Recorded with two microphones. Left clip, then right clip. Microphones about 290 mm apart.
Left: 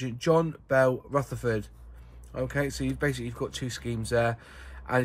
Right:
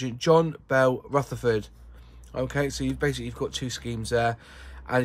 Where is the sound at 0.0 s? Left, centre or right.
Centre.